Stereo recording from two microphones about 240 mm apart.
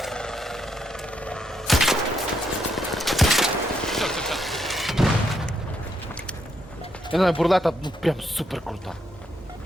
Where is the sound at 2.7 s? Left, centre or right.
Centre.